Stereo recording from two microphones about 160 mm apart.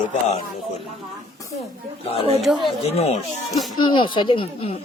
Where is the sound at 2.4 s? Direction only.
Centre (ahead or behind).